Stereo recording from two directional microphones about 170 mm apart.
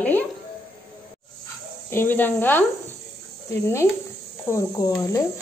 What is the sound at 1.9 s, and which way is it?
Speech, 10° left (ahead or behind).